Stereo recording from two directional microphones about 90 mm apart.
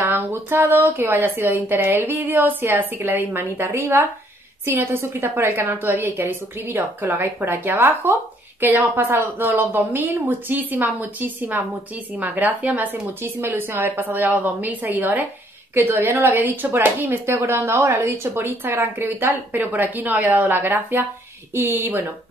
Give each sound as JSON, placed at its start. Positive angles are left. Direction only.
{"t": 0.0, "sound": "speech", "side_deg": -25}